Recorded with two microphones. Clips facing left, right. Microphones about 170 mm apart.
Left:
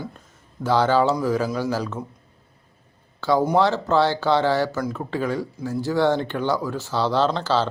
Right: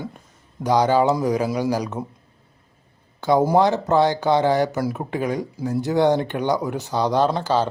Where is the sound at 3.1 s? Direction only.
20° right (ahead or behind).